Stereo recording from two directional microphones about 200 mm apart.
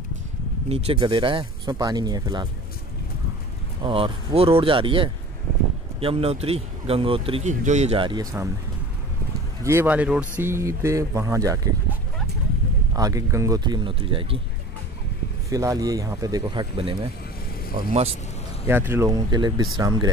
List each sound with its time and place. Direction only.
0.7 s speech: 30° right (ahead or behind)
3.8 s speech: 25° right (ahead or behind)
9.6 s speech: 10° right (ahead or behind)
12.9 s speech: 15° right (ahead or behind)
15.5 s speech: 15° right (ahead or behind)
18.7 s speech: 10° right (ahead or behind)